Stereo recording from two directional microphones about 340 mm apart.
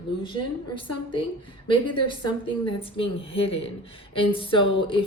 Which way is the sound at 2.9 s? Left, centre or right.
Centre.